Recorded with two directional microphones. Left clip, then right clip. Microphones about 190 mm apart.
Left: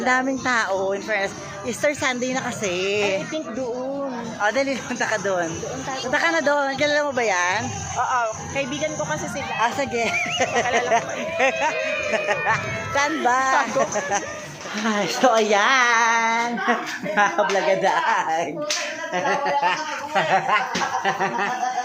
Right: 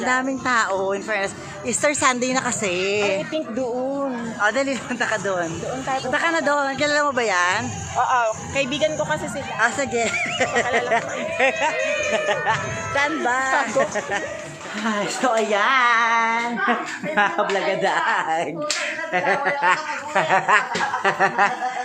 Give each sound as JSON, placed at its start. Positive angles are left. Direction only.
{"t": 0.0, "sound": "a woman's voice", "side_deg": 5}
{"t": 4.4, "sound": "speech", "side_deg": -5}
{"t": 7.9, "sound": "speech", "side_deg": -50}
{"t": 9.6, "sound": "a woman's voice", "side_deg": -5}
{"t": 21.0, "sound": "a sound", "side_deg": -25}